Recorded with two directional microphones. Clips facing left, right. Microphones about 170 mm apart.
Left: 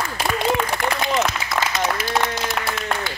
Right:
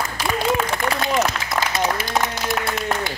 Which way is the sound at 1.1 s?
5° right (ahead or behind).